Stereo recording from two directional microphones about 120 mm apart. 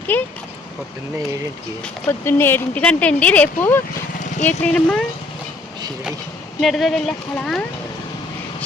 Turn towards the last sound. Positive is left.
turn(degrees=0)  # may be behind; listen again after turning